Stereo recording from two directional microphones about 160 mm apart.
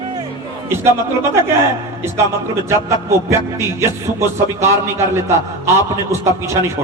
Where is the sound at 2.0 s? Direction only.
15° right (ahead or behind).